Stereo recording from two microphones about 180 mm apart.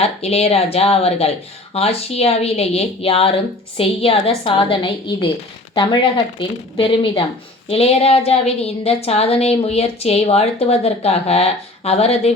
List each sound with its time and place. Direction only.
0.0 s a woman's voice: 35° left (ahead or behind)